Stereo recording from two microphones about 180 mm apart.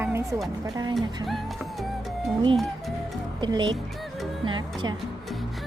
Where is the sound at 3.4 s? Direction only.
25° right (ahead or behind).